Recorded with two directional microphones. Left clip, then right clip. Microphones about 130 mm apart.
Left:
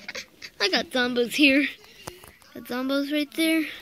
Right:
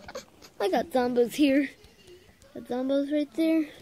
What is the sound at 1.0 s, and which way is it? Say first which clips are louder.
A woman's voice: left 3 dB; 10° left (ahead or behind).